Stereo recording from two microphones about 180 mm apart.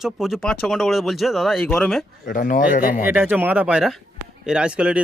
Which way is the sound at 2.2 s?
50° left (ahead or behind).